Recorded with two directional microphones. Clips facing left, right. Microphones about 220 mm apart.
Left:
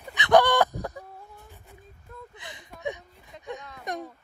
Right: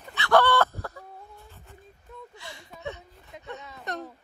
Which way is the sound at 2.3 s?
20° left (ahead or behind).